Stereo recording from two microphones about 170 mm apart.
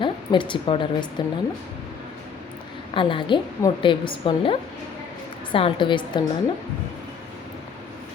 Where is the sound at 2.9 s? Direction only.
30° left (ahead or behind).